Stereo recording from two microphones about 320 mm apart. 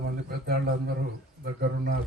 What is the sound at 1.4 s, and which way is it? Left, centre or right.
Speech, right.